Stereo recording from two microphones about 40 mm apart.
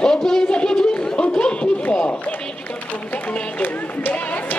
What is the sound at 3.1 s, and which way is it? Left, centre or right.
Speech, left.